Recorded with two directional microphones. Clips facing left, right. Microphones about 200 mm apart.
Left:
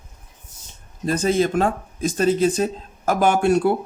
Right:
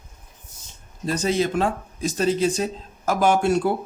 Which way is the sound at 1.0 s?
50° left (ahead or behind).